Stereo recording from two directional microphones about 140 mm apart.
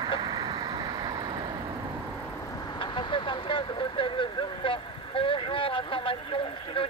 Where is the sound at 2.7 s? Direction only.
35° left (ahead or behind).